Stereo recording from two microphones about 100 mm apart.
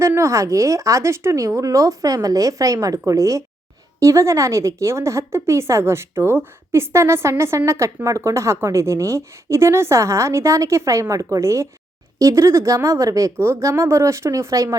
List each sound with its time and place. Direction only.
0.0 s a woman's voice: 30° right (ahead or behind)